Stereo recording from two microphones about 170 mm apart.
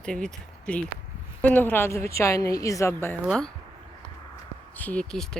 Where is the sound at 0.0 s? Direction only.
5° left (ahead or behind).